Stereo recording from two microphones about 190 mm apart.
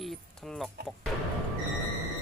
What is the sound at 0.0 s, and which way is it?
Chicken, centre (ahead or behind).